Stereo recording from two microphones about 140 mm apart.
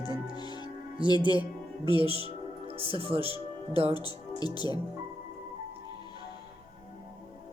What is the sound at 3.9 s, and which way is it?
Speech, 30° left (ahead or behind).